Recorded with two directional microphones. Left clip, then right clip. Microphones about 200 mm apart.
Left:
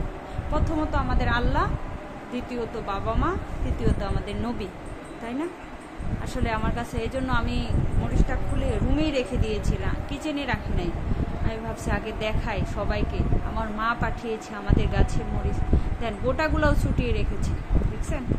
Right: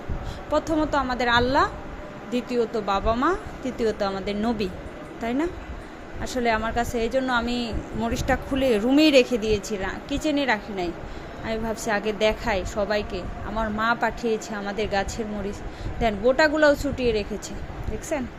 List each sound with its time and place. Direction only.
0.5 s speech: 25° right (ahead or behind)
6.3 s speech: 20° right (ahead or behind)
8.1 s speech: 35° right (ahead or behind)
9.4 s speech: 25° right (ahead or behind)